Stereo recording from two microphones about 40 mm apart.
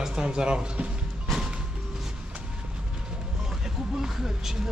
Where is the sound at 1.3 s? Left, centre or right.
Centre.